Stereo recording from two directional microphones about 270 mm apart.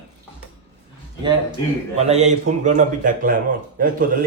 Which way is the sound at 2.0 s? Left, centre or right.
Right.